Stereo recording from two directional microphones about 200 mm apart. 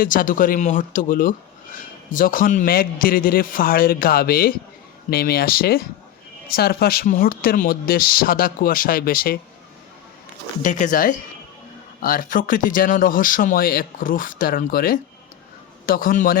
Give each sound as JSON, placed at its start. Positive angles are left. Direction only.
{"t": 0.0, "sound": "speech", "side_deg": 45}
{"t": 10.6, "sound": "speech", "side_deg": 40}